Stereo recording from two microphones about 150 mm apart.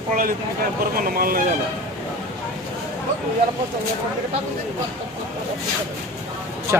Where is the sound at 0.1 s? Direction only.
70° right (ahead or behind).